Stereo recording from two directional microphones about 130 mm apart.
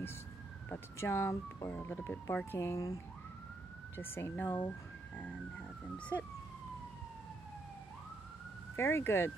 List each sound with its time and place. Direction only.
0.7 s speech: 20° left (ahead or behind)
8.7 s speech: 20° left (ahead or behind)